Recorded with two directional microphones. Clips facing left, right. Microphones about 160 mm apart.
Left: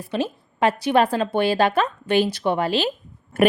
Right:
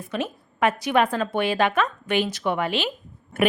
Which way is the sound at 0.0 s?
30° left (ahead or behind).